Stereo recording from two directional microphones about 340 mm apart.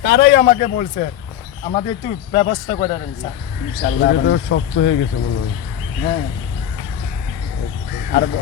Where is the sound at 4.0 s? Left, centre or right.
Left.